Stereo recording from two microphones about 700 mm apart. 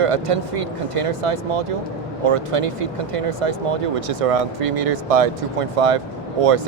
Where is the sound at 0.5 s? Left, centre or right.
Right.